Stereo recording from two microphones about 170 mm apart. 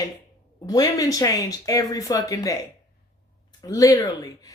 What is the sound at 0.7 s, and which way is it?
Speech, 20° left (ahead or behind).